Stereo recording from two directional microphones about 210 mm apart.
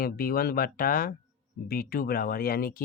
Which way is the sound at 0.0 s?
45° left (ahead or behind).